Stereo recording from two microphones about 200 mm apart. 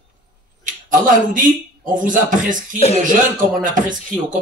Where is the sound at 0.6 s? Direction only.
40° right (ahead or behind).